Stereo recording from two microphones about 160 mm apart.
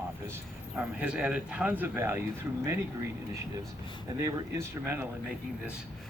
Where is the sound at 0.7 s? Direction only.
10° right (ahead or behind).